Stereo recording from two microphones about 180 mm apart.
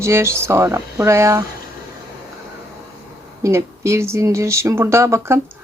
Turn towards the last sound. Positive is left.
turn(degrees=-15)  # may be behind; listen again after turning